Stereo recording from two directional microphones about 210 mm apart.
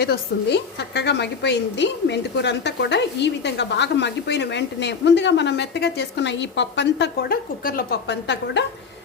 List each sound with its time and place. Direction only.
0.0 s a woman's voice: 50° left (ahead or behind)